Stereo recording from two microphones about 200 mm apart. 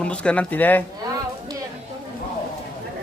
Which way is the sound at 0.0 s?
5° left (ahead or behind).